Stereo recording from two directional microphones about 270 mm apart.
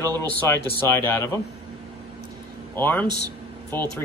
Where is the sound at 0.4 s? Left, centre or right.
Centre.